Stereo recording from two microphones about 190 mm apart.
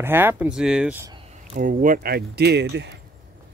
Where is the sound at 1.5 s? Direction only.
45° right (ahead or behind); by 2.9 s 65° right (ahead or behind).